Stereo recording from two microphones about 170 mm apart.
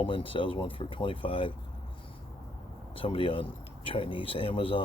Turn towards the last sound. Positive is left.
turn(degrees=30)  # may be behind; listen again after turning